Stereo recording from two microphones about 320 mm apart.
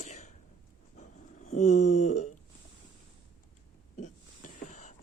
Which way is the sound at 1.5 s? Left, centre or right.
Left.